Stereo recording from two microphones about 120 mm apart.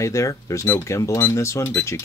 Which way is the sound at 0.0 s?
25° left (ahead or behind).